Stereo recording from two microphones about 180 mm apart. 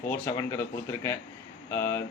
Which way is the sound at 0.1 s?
15° left (ahead or behind).